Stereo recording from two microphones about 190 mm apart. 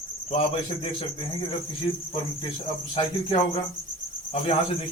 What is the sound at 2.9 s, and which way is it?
Speech, 30° left (ahead or behind).